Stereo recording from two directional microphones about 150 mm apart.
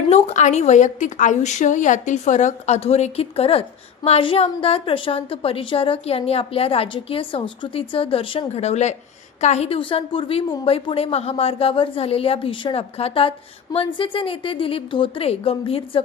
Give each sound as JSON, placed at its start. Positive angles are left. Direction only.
{"t": 0.1, "sound": "a woman's voice", "side_deg": 50}